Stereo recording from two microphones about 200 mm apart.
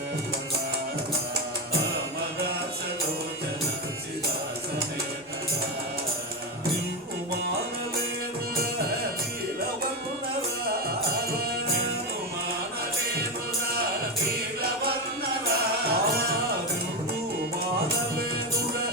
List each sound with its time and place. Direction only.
10.7 s music: 50° right (ahead or behind)
15.9 s music: 50° right (ahead or behind)